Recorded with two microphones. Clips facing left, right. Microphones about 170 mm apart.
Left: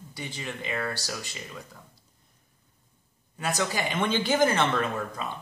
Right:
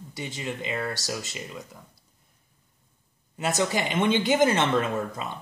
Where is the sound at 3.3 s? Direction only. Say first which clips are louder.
Right 3 dB; 25° right (ahead or behind).